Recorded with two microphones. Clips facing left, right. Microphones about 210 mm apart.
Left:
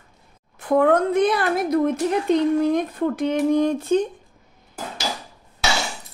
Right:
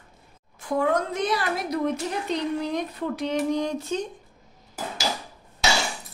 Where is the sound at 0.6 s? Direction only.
60° left (ahead or behind).